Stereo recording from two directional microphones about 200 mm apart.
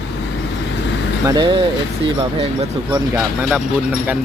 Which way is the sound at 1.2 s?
20° right (ahead or behind).